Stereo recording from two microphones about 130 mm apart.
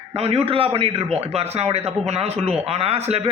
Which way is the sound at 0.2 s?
50° right (ahead or behind).